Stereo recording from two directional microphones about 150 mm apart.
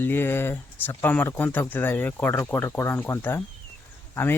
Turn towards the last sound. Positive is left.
turn(degrees=15)  # may be behind; listen again after turning